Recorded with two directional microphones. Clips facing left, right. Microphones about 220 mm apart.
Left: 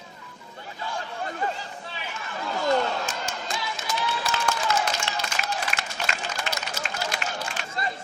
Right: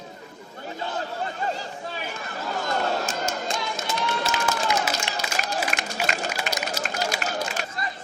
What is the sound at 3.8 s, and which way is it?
Run, 40° right (ahead or behind).